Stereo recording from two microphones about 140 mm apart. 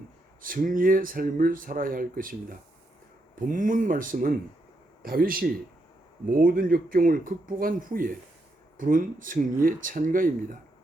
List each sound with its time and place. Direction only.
0.4 s speech: 80° right
3.4 s speech: 70° right (ahead or behind)
5.0 s speech: 90° right
8.8 s speech: 75° right (ahead or behind)